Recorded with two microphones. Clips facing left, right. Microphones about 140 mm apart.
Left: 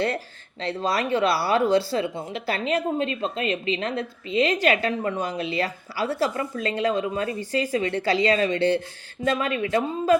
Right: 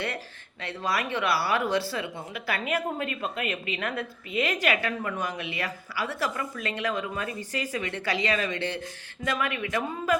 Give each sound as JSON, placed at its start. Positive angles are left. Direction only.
{"t": 0.6, "sound": "speech", "side_deg": 30}